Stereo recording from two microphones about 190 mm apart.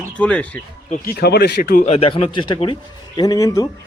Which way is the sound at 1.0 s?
55° left (ahead or behind).